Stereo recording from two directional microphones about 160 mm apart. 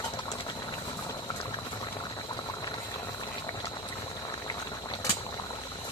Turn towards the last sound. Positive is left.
turn(degrees=25)  # may be behind; listen again after turning